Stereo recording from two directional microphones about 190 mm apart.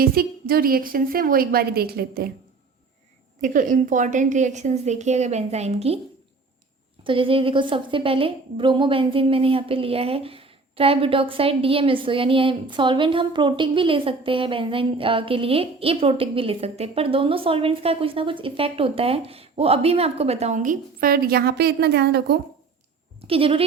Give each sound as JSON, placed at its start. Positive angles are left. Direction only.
{"t": 0.0, "sound": "a woman's voice", "side_deg": -50}
{"t": 3.4, "sound": "a woman's voice", "side_deg": -45}
{"t": 7.0, "sound": "a woman's voice", "side_deg": -30}
{"t": 23.2, "sound": "a woman's voice", "side_deg": -30}